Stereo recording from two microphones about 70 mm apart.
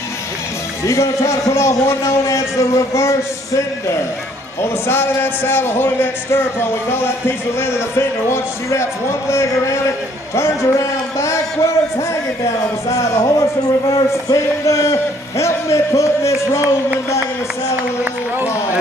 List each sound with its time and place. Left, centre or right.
0.8 s speech: left
4.6 s speech: left
12.4 s speech: left